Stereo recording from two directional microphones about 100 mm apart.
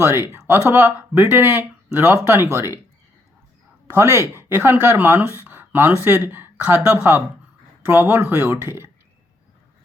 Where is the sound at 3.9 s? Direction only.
25° right (ahead or behind).